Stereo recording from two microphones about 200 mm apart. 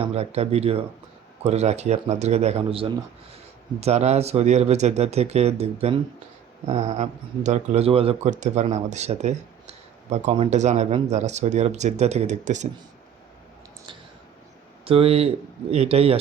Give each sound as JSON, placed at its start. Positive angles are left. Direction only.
{"t": 0.0, "sound": "a man's voice", "side_deg": -30}
{"t": 14.8, "sound": "a man's voice", "side_deg": -30}